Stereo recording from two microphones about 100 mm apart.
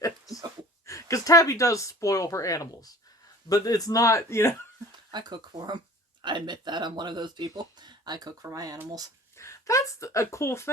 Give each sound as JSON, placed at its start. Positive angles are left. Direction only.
{"t": 0.9, "sound": "speech", "side_deg": 30}
{"t": 4.9, "sound": "speech", "side_deg": -45}
{"t": 9.4, "sound": "speech", "side_deg": 30}